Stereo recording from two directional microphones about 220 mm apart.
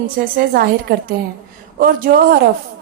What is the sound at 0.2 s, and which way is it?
A woman's voice, 45° right (ahead or behind).